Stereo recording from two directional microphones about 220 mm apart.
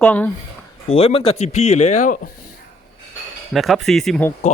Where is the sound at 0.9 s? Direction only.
25° left (ahead or behind).